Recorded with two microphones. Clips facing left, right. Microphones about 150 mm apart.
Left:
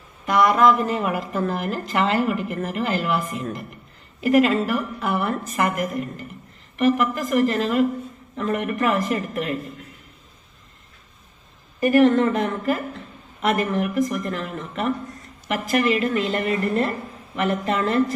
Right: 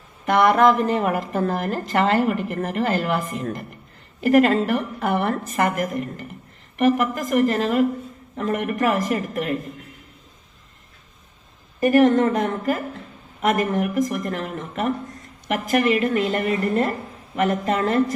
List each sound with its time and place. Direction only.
0.3 s speech: 60° right (ahead or behind)
11.8 s speech: 45° right (ahead or behind)